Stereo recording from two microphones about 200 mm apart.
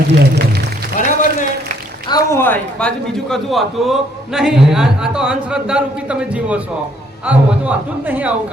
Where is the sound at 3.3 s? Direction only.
Centre (ahead or behind).